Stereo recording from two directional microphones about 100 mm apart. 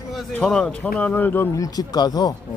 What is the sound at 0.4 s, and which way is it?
Speech, 5° left (ahead or behind).